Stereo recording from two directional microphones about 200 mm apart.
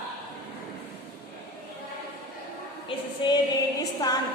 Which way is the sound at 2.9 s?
25° left (ahead or behind).